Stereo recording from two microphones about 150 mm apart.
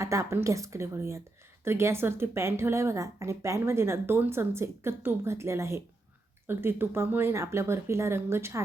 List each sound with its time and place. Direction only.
0.0 s a woman's voice: 20° right (ahead or behind)